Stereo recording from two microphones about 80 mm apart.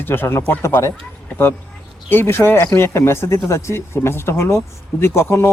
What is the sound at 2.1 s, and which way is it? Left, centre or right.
A man's voice, left.